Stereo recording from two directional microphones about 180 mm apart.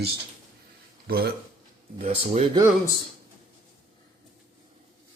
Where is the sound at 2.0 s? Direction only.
35° right (ahead or behind).